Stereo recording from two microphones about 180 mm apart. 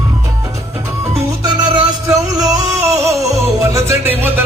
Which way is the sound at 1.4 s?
25° right (ahead or behind).